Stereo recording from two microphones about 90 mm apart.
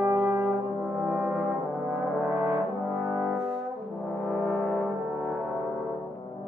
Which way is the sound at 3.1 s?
5° right (ahead or behind).